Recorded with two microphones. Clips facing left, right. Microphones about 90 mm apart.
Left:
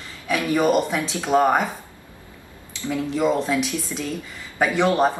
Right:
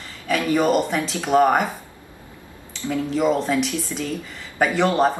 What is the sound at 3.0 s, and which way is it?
Speech, centre (ahead or behind).